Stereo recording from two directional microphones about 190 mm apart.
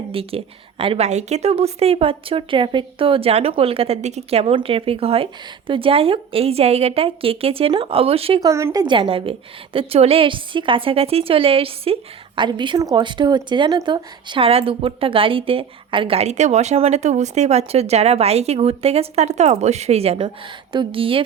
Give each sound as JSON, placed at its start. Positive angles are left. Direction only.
{"t": 0.1, "sound": "a woman's voice", "side_deg": -30}
{"t": 8.4, "sound": "a woman's voice", "side_deg": -15}